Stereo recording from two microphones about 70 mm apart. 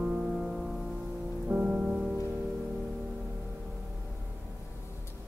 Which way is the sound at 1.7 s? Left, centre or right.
Centre.